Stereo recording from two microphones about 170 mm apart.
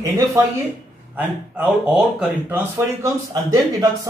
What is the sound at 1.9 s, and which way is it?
Speech, 10° right (ahead or behind).